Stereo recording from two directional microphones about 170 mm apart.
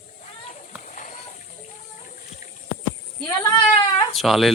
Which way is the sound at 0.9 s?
45° left (ahead or behind).